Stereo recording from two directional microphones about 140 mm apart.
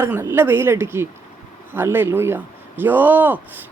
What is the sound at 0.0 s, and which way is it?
Speech, 15° right (ahead or behind).